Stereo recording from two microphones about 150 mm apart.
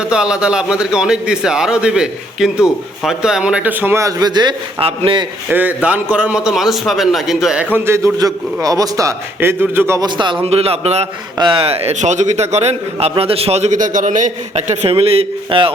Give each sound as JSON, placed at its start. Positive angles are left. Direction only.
{"t": 0.0, "sound": "a man's voice", "side_deg": -5}
{"t": 5.5, "sound": "a man's voice", "side_deg": -10}
{"t": 10.4, "sound": "a man's voice", "side_deg": -40}
{"t": 11.3, "sound": "a man's voice", "side_deg": -35}